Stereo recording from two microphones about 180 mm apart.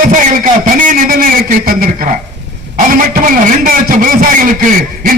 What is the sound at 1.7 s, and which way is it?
A man's voice, 50° right (ahead or behind).